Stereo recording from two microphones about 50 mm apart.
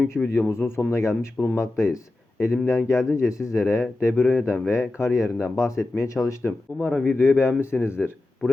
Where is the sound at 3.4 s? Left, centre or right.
Left.